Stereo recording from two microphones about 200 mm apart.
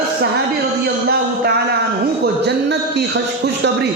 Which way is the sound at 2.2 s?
55° right (ahead or behind).